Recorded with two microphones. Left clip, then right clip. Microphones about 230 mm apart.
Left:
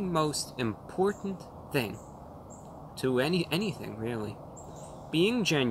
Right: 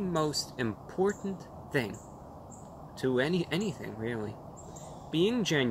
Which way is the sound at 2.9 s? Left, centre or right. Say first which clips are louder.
Left 1 dB; centre.